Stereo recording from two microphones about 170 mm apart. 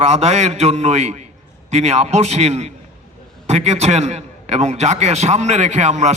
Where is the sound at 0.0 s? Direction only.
40° right (ahead or behind).